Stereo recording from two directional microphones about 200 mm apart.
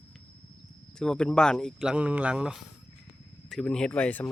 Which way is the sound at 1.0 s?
5° left (ahead or behind).